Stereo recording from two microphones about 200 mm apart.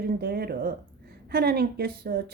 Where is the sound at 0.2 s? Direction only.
50° right (ahead or behind).